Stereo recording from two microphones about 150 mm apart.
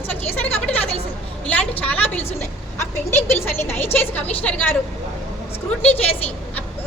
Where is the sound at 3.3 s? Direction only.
15° left (ahead or behind).